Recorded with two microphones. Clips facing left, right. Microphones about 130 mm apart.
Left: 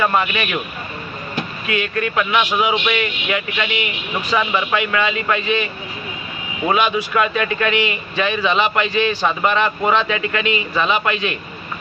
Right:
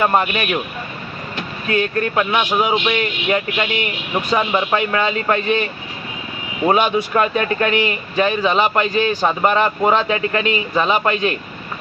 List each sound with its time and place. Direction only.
0.0 s speech: 35° right (ahead or behind)
1.6 s speech: 40° right (ahead or behind)
2.3 s a man's voice: 15° right (ahead or behind)
2.8 s speech: 30° right (ahead or behind)
6.7 s speech: 40° right (ahead or behind)